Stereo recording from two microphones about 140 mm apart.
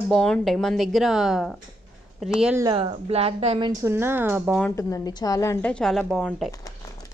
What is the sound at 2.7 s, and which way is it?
Speech, 40° right (ahead or behind).